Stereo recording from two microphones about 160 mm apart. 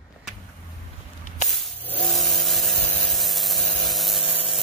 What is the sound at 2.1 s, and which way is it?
Sanding, centre (ahead or behind).